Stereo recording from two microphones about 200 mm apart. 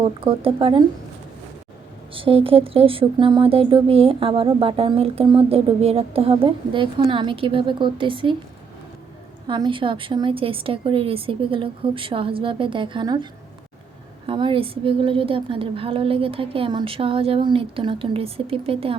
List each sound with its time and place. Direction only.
0.0 s speech: 25° right (ahead or behind)
2.1 s speech: 25° right (ahead or behind)
9.5 s speech: 25° right (ahead or behind)
14.3 s speech: 25° right (ahead or behind)